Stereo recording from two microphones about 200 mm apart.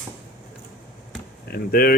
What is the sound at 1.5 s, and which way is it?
Speech, 50° left (ahead or behind).